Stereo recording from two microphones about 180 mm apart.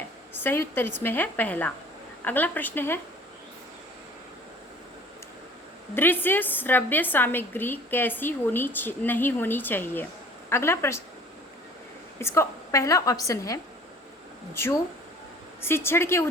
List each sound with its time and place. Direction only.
0.3 s a woman's voice: 10° left (ahead or behind)
5.9 s a woman's voice: 10° left (ahead or behind)
12.2 s a woman's voice: 15° left (ahead or behind)